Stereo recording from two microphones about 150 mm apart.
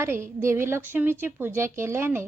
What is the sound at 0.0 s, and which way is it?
A woman's voice, 15° right (ahead or behind).